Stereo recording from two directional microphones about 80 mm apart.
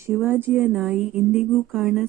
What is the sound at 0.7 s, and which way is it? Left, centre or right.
Speech, centre.